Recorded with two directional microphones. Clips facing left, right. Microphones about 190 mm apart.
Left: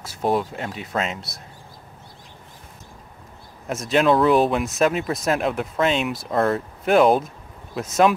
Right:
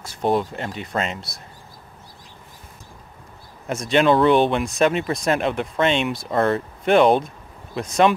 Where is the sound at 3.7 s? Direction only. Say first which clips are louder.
Right 1 dB; centre (ahead or behind).